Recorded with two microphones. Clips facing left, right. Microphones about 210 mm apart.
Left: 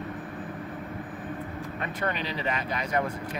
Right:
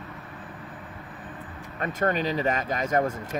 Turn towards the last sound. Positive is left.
turn(degrees=-45)  # may be behind; listen again after turning